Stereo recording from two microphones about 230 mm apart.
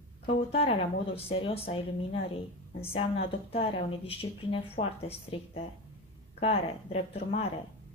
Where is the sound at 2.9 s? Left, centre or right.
Left.